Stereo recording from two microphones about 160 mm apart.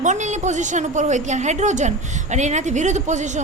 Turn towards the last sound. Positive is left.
turn(degrees=-50)  # may be behind; listen again after turning